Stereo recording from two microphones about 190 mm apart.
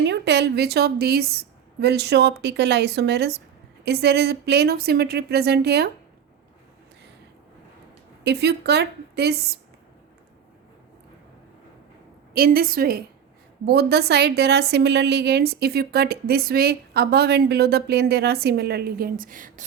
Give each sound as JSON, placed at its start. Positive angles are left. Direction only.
{"t": 0.0, "sound": "a woman's voice", "side_deg": -65}
{"t": 8.2, "sound": "a woman's voice", "side_deg": -60}
{"t": 12.3, "sound": "a woman's voice", "side_deg": -50}